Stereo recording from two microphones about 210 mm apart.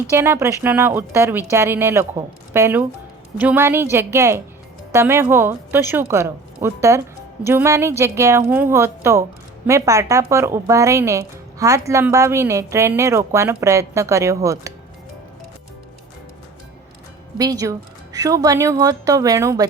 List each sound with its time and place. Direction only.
0.1 s speech: 15° right (ahead or behind)
17.3 s speech: 15° right (ahead or behind)